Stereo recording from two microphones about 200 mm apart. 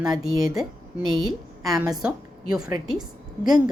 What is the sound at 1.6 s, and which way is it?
Speech, centre (ahead or behind).